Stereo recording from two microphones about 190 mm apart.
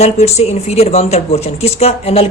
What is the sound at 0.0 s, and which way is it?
Speech, 35° left (ahead or behind).